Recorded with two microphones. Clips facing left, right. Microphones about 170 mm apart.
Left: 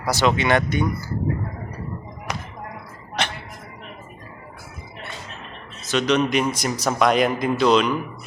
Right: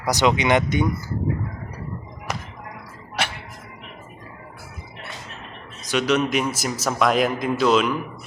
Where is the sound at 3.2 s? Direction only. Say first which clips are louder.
Left 1 dB; 5° right (ahead or behind).